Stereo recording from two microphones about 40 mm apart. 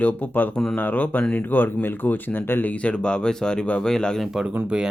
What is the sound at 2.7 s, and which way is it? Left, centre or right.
Speech, left.